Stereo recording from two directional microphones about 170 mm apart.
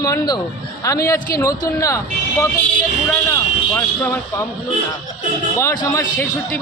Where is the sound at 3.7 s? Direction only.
10° left (ahead or behind).